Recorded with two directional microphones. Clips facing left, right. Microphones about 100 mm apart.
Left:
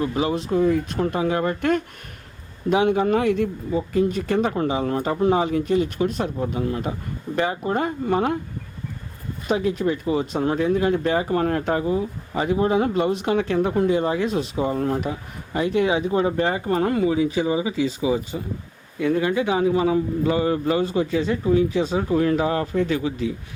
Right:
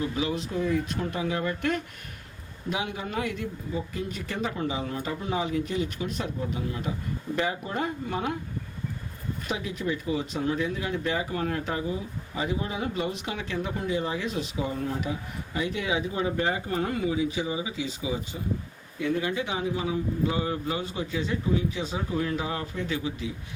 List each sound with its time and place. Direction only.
0.0 s speech: 45° left (ahead or behind)
9.5 s a man's voice: 45° left (ahead or behind)